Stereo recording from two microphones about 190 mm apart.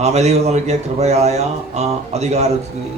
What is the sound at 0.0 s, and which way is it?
A man's voice, 35° right (ahead or behind).